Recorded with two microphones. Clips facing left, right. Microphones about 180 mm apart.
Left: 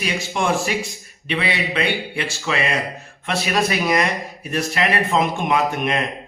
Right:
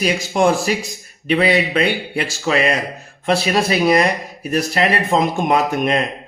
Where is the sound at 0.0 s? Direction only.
40° right (ahead or behind).